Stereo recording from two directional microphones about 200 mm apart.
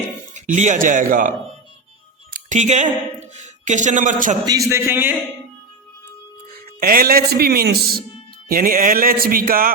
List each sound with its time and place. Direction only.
0.3 s speech: 40° right (ahead or behind)
2.3 s a woman's voice: 35° right (ahead or behind)
4.4 s a man's voice: 15° right (ahead or behind)
6.7 s a man's voice: 50° right (ahead or behind)